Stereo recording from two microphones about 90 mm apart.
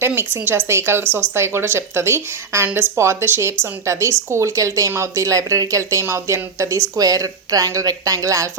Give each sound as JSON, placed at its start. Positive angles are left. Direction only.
{"t": 0.0, "sound": "speech", "side_deg": -25}